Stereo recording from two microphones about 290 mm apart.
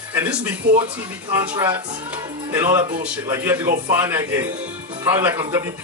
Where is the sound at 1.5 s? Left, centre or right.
Centre.